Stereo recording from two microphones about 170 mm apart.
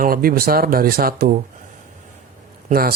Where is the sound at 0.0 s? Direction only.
60° right (ahead or behind).